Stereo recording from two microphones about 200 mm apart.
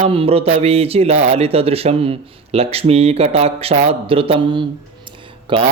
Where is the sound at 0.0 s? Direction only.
30° right (ahead or behind).